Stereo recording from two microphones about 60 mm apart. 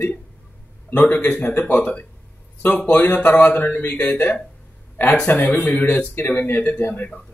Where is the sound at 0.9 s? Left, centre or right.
Left.